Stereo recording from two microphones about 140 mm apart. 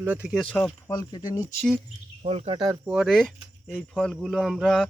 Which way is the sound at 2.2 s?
50° right (ahead or behind).